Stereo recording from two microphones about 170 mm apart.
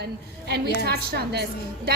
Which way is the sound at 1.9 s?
65° right (ahead or behind).